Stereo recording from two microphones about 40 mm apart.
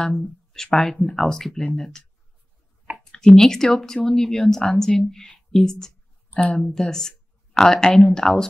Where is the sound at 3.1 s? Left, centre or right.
Centre.